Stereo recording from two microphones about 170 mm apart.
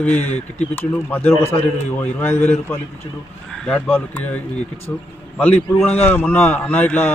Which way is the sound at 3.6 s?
5° left (ahead or behind).